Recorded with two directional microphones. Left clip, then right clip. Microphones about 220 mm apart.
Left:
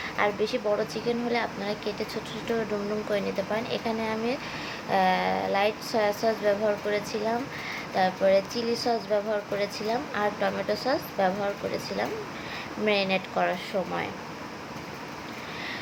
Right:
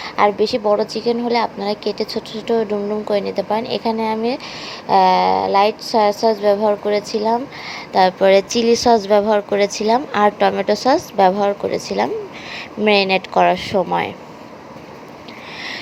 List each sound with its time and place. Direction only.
0.0 s speech: 30° right (ahead or behind)
7.9 s a woman's voice: 35° right (ahead or behind)